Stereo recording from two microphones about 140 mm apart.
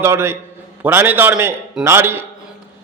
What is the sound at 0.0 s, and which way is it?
A man's voice, 15° right (ahead or behind).